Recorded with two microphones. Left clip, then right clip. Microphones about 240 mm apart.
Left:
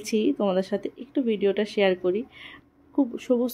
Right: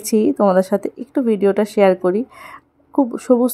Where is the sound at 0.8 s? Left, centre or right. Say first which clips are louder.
Right 8 dB; right.